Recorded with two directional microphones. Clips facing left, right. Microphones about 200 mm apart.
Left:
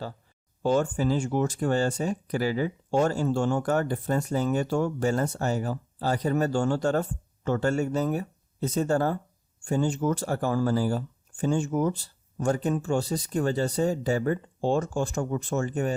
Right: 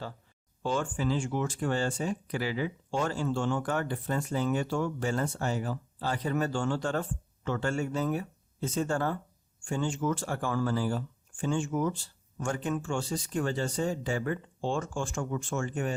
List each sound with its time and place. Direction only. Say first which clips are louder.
0.6 s speech: left 6 dB; 40° left (ahead or behind)